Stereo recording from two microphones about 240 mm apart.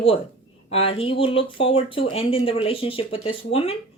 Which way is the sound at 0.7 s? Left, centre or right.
Left.